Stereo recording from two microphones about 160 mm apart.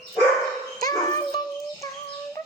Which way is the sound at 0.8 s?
25° left (ahead or behind).